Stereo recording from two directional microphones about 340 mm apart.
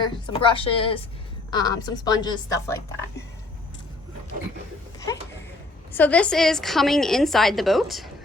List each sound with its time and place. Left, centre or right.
0.0 s a woman's voice: centre
5.9 s a woman's voice: centre